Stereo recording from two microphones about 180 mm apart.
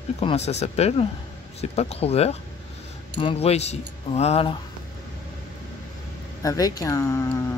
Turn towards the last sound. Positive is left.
turn(degrees=15)  # may be behind; listen again after turning